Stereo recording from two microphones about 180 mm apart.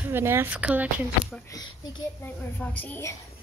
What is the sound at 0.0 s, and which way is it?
A woman's voice, 10° right (ahead or behind).